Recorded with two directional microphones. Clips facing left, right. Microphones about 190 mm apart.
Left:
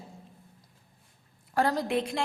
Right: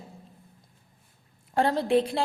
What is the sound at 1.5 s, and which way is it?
Speech, 25° right (ahead or behind).